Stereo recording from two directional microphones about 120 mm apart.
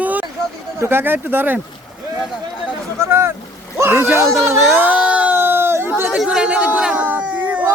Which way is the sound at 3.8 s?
20° right (ahead or behind).